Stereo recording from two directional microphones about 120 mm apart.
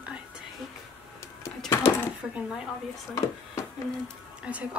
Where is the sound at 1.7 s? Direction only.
20° left (ahead or behind).